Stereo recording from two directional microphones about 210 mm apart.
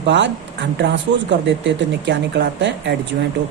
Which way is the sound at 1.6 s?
55° right (ahead or behind).